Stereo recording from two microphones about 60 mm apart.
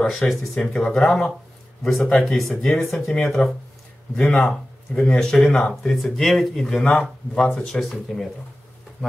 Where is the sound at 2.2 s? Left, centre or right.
Centre.